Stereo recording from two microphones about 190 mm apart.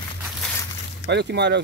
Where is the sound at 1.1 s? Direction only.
60° right (ahead or behind).